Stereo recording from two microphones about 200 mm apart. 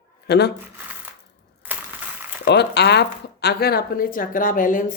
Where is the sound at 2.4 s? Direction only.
55° left (ahead or behind).